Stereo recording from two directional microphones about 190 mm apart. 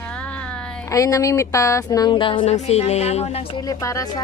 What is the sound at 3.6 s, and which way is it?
Speech, 20° left (ahead or behind).